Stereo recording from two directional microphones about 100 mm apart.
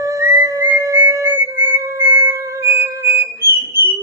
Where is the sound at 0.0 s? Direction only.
30° right (ahead or behind).